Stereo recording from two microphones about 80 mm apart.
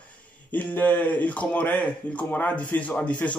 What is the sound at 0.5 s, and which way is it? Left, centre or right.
Speech, left.